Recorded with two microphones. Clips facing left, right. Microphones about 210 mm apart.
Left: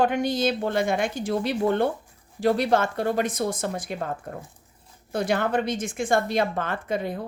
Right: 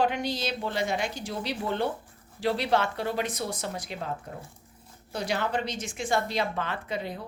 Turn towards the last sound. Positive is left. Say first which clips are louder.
# left 6 dB
turn(degrees=50)  # may be behind; listen again after turning